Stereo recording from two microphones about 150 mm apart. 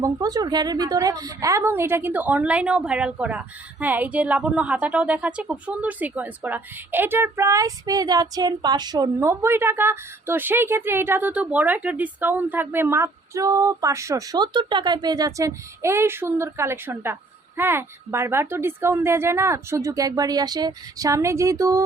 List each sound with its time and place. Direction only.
0.0 s a woman's voice: 25° right (ahead or behind)